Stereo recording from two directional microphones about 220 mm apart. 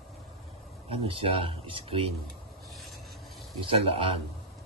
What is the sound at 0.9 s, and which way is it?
Speech, 25° right (ahead or behind).